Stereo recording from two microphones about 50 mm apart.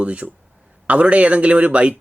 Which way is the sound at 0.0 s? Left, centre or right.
Right.